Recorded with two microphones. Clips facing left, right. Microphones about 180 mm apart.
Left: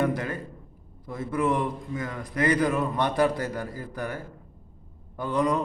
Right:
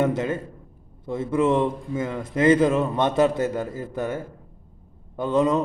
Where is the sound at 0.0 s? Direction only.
20° right (ahead or behind).